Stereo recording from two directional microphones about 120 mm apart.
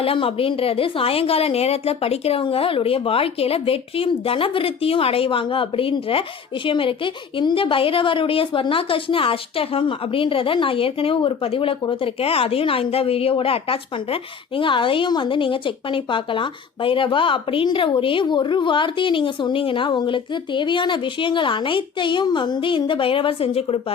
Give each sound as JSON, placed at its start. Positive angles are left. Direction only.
{"t": 0.0, "sound": "a woman's voice", "side_deg": 50}